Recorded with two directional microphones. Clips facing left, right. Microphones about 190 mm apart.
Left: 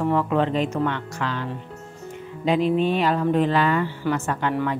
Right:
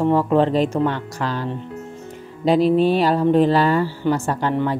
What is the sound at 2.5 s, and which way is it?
Speech, 35° right (ahead or behind).